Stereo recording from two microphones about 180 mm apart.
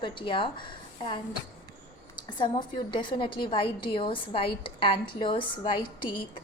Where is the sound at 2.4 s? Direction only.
25° left (ahead or behind).